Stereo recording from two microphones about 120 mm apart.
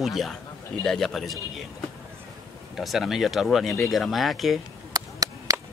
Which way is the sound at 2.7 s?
Centre (ahead or behind).